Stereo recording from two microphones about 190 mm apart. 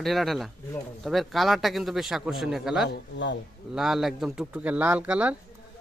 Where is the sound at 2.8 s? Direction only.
70° left (ahead or behind).